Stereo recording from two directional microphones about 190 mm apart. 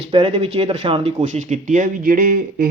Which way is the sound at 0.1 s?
30° right (ahead or behind).